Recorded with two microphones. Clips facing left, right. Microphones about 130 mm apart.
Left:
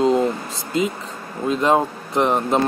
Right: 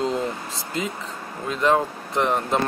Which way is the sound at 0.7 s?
20° left (ahead or behind).